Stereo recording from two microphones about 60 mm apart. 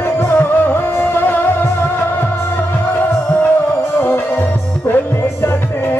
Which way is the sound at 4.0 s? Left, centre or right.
Left.